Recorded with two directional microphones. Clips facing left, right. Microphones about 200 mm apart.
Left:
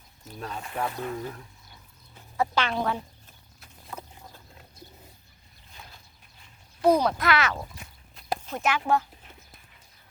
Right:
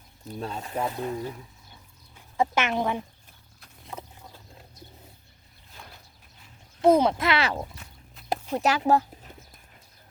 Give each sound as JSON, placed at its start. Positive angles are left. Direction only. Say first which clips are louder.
{"t": 0.3, "sound": "speech", "louder": "right 2 dB", "side_deg": -25}
{"t": 2.4, "sound": "speech", "louder": "right 2 dB", "side_deg": -20}
{"t": 6.8, "sound": "speech", "louder": "right 2 dB", "side_deg": -25}
{"t": 8.9, "sound": "horse", "louder": "right 3 dB", "side_deg": -40}